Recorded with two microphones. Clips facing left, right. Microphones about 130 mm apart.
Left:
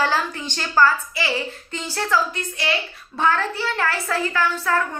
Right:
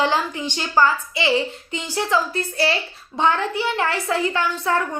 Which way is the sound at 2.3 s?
35° right (ahead or behind).